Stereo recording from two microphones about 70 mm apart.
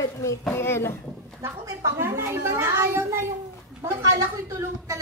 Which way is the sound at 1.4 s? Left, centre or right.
Right.